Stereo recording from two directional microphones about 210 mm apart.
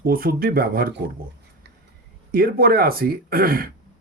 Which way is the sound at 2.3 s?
45° right (ahead or behind).